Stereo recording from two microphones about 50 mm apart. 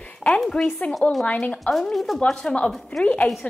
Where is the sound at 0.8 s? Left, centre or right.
Left.